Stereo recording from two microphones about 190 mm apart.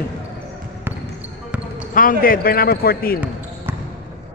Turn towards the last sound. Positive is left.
turn(degrees=50)  # may be behind; listen again after turning